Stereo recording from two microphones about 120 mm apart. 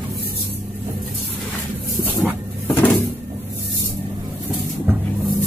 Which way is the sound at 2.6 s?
20° left (ahead or behind).